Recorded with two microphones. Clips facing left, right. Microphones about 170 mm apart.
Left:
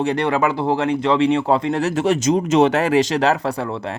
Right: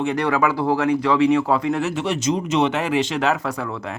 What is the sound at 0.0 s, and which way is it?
Speech, 30° left (ahead or behind).